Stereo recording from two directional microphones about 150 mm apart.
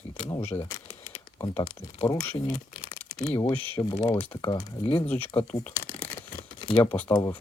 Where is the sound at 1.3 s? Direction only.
20° left (ahead or behind).